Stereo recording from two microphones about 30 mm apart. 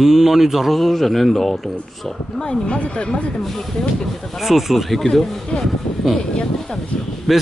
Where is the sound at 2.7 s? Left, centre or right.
Left.